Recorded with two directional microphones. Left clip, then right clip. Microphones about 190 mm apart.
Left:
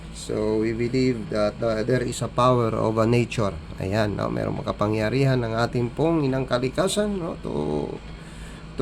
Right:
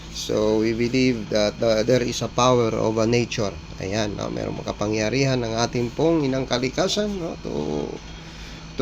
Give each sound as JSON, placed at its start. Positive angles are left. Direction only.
{"t": 0.2, "sound": "speech", "side_deg": 5}